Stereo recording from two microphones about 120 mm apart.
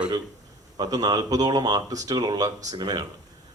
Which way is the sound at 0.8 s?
35° right (ahead or behind).